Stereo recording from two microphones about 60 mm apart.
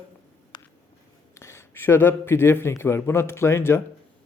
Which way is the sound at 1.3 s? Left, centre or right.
Left.